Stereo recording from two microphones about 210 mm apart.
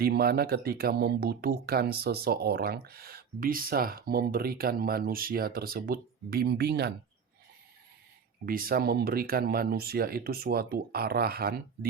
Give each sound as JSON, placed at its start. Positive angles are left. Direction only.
{"t": 0.0, "sound": "speech", "side_deg": -45}
{"t": 8.4, "sound": "speech", "side_deg": -45}